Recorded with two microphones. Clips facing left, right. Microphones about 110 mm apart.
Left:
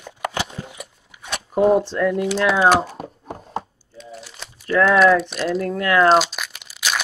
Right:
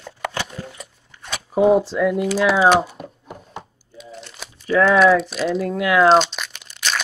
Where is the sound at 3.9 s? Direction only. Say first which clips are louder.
Even; centre (ahead or behind).